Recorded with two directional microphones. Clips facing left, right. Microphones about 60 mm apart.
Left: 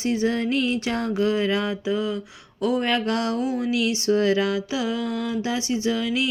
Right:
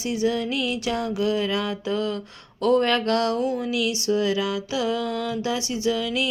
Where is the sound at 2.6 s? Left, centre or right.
Centre.